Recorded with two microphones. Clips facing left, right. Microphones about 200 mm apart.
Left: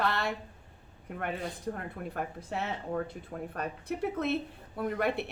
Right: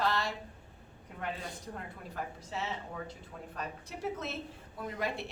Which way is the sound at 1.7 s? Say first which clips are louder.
Left 5 dB; 55° left (ahead or behind).